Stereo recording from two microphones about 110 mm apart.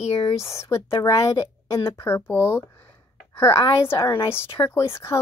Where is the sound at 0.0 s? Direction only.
65° left (ahead or behind).